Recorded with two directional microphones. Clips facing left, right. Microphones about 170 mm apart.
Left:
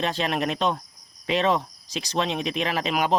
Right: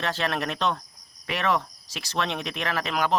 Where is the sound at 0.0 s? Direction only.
15° left (ahead or behind).